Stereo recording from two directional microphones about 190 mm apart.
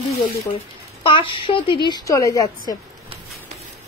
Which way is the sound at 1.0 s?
25° left (ahead or behind).